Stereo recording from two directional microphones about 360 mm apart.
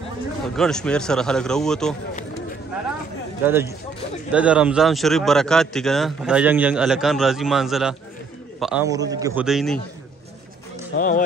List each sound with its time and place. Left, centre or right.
0.6 s speech: centre
3.4 s a man's voice: centre
10.9 s speech: left